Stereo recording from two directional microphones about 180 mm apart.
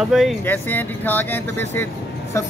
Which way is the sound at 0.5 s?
10° left (ahead or behind).